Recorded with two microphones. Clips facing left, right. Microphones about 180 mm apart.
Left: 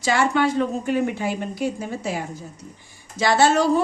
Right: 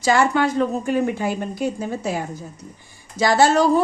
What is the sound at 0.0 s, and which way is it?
A woman's voice, 45° right (ahead or behind).